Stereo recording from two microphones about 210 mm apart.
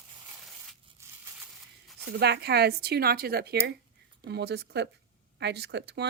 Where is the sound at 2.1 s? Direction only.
50° right (ahead or behind).